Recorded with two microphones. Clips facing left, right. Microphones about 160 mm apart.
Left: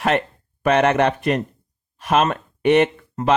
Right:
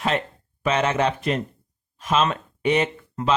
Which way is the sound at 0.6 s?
60° left (ahead or behind).